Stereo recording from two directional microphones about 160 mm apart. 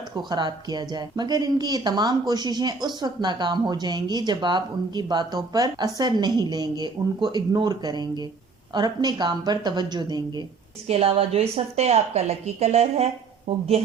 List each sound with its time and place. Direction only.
0.3 s speech: 25° right (ahead or behind)
10.8 s a woman's voice: 35° right (ahead or behind)